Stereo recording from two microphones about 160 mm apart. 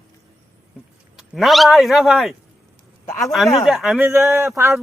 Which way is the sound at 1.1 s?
Centre (ahead or behind).